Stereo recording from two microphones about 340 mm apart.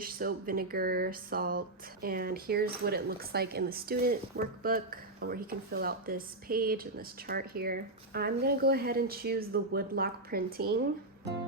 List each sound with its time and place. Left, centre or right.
0.0 s speech: right